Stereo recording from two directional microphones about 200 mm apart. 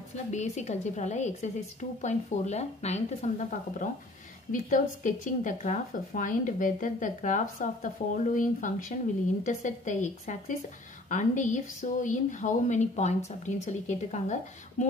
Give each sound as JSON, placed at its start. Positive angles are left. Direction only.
{"t": 0.3, "sound": "speech", "side_deg": 35}